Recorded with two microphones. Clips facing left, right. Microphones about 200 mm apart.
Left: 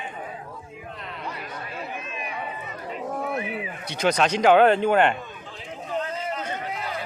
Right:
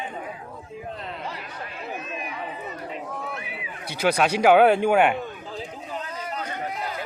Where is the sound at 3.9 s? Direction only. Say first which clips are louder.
Even; 5° right (ahead or behind).